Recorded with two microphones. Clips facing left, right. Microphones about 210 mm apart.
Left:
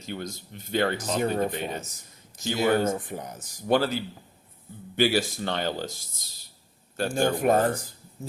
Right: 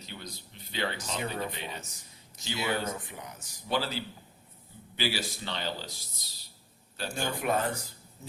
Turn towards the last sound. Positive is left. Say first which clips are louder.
# left 8 dB
turn(degrees=45)  # may be behind; listen again after turning